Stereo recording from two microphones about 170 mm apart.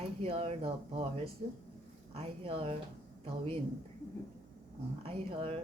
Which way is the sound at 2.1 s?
35° right (ahead or behind).